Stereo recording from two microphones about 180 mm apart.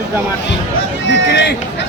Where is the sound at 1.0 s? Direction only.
70° left (ahead or behind).